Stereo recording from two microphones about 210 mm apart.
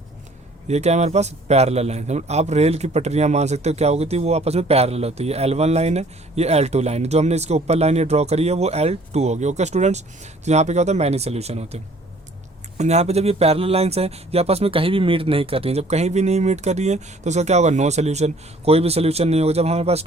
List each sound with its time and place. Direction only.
0.7 s a man's voice: 30° right (ahead or behind)